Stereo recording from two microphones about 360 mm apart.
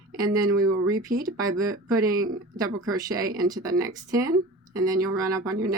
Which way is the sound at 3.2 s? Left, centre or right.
Right.